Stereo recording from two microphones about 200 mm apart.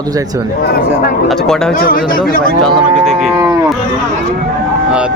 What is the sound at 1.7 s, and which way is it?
Speech, 45° left (ahead or behind).